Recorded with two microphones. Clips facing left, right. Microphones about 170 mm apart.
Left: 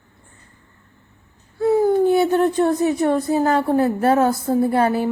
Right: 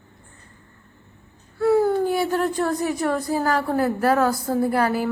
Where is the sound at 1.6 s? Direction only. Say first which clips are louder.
Left 3 dB; 20° left (ahead or behind).